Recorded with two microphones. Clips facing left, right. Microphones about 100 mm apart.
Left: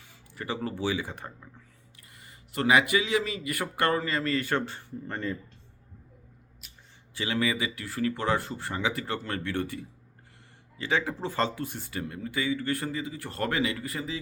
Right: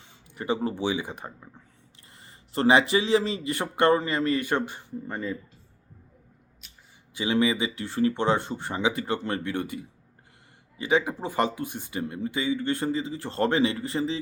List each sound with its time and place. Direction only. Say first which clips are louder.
0.1 s speech: right 6 dB; 20° right (ahead or behind)
2.1 s speech: right 3 dB; 30° right (ahead or behind); by 5.4 s 10° right (ahead or behind)
7.1 s speech: right 5 dB; 20° right (ahead or behind)